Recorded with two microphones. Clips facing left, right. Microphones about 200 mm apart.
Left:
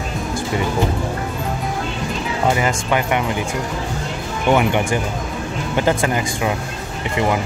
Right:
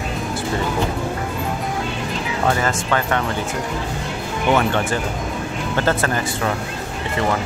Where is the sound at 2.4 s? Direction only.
15° left (ahead or behind).